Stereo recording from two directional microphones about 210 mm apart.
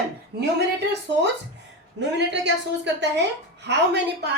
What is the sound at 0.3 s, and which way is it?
A woman's voice, 55° right (ahead or behind).